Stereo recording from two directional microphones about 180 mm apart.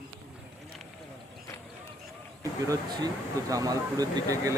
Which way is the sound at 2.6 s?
20° right (ahead or behind).